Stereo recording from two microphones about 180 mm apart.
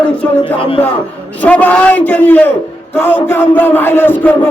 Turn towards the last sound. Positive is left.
turn(degrees=10)  # may be behind; listen again after turning